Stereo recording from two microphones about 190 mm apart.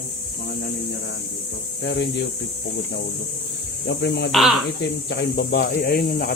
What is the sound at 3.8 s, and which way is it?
Speech, 65° left (ahead or behind).